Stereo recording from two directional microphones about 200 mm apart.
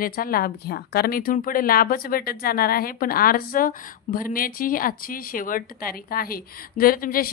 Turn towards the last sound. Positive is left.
turn(degrees=45)  # may be behind; listen again after turning